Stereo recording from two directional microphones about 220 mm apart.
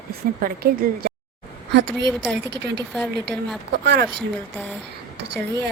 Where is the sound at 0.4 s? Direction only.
40° right (ahead or behind).